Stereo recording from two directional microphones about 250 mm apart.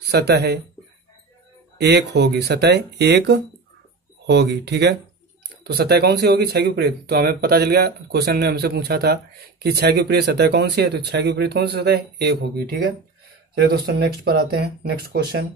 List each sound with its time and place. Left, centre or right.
0.0 s speech: right
1.8 s speech: right